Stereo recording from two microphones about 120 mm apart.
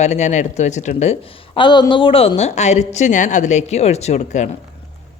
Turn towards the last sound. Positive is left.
turn(degrees=75)  # may be behind; listen again after turning